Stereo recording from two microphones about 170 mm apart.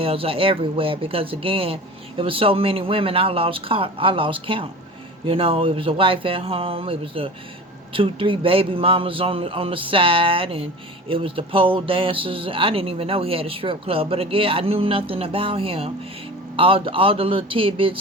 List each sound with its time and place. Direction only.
0.0 s speech: 35° right (ahead or behind)